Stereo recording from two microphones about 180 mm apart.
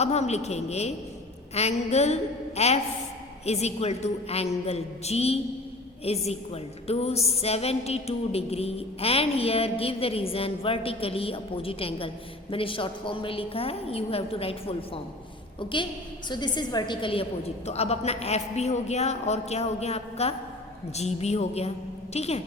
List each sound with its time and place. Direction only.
0.0 s a woman's voice: 35° left (ahead or behind)
16.3 s a woman's voice: 25° left (ahead or behind)